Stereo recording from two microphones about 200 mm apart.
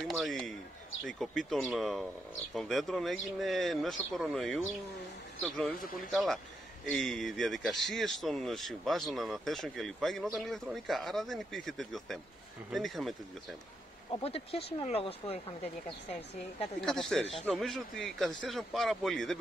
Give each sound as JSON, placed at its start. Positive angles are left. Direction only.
{"t": 0.0, "sound": "a man's voice", "side_deg": 0}
{"t": 14.2, "sound": "speech", "side_deg": 30}
{"t": 16.8, "sound": "speech", "side_deg": 0}